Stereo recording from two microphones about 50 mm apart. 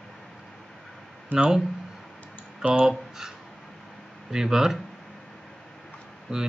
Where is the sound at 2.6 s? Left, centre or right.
Centre.